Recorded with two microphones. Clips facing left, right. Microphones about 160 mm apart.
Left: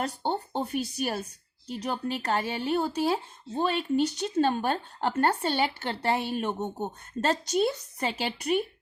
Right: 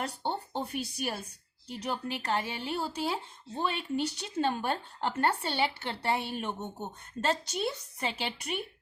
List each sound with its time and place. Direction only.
0.0 s speech: 40° left (ahead or behind)